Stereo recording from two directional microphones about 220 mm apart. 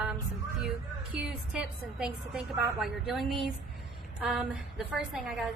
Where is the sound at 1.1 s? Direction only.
5° right (ahead or behind).